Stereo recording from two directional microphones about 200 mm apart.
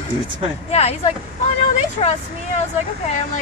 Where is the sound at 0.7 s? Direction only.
30° left (ahead or behind).